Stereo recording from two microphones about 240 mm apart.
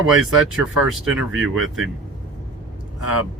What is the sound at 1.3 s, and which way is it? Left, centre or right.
Speech, right.